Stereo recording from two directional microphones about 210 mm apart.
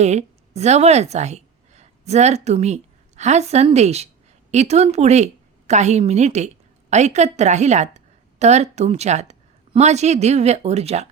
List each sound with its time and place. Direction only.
0.0 s a woman's voice: 30° right (ahead or behind)